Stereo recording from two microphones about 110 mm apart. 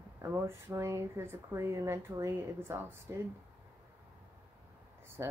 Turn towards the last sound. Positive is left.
turn(degrees=-30)  # may be behind; listen again after turning